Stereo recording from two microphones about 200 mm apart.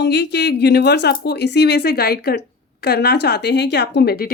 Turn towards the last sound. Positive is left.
turn(degrees=50)  # may be behind; listen again after turning